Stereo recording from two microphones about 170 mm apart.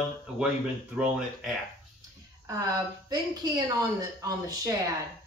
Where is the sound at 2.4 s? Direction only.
20° right (ahead or behind).